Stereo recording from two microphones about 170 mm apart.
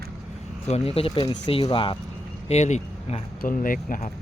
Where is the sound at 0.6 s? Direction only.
35° left (ahead or behind).